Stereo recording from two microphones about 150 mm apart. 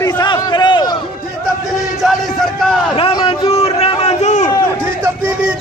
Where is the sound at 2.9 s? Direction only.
35° left (ahead or behind); by 4.5 s 50° left (ahead or behind).